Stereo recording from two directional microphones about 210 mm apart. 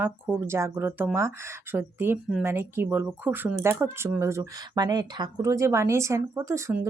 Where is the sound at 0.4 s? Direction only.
10° right (ahead or behind).